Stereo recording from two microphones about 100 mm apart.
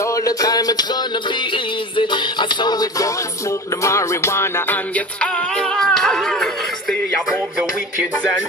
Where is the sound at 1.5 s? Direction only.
55° left (ahead or behind); by 4.8 s 25° left (ahead or behind).